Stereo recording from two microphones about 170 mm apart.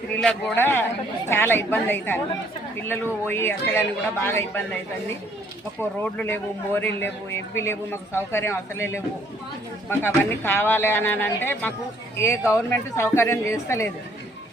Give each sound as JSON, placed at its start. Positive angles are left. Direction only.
{"t": 0.1, "sound": "a man's voice", "side_deg": 5}
{"t": 5.8, "sound": "a man's voice", "side_deg": 10}